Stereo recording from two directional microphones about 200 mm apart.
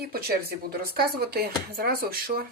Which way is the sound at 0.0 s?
50° right (ahead or behind).